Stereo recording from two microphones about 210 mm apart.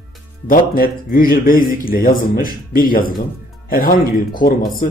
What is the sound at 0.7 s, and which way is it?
Speech, 45° left (ahead or behind).